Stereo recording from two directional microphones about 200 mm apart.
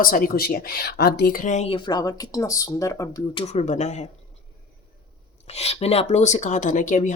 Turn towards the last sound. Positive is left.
turn(degrees=40)  # may be behind; listen again after turning